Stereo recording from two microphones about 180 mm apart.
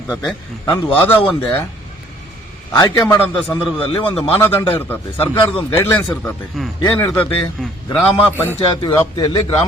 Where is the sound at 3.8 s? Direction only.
30° left (ahead or behind).